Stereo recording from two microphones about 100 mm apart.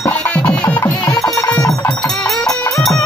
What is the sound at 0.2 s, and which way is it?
Music, 10° left (ahead or behind).